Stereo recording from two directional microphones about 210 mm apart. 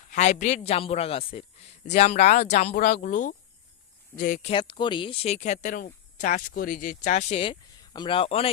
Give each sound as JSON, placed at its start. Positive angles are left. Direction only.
{"t": 0.0, "sound": "a man's voice", "side_deg": 35}
{"t": 4.5, "sound": "a man's voice", "side_deg": 25}